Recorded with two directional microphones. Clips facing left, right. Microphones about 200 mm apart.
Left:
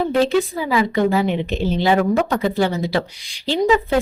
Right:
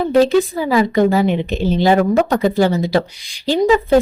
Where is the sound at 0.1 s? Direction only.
40° right (ahead or behind).